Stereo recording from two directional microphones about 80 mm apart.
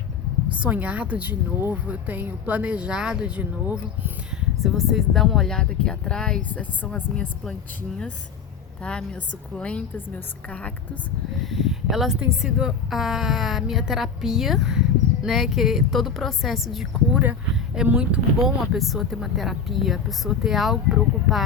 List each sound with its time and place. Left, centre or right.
0.6 s speech: centre
4.4 s speech: centre
6.5 s speech: centre
8.8 s a woman's voice: centre
11.5 s speech: centre
17.8 s speech: centre
18.3 s speech: centre